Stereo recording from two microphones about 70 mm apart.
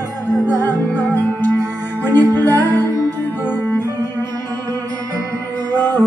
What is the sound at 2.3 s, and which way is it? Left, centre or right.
Music, right.